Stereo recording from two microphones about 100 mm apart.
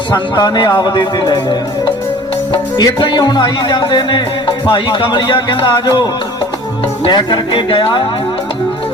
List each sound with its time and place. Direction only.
0.1 s speech: 45° left (ahead or behind)